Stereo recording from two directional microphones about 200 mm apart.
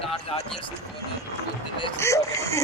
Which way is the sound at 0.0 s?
30° left (ahead or behind).